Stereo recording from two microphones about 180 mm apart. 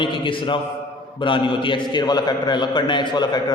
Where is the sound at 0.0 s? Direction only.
25° left (ahead or behind).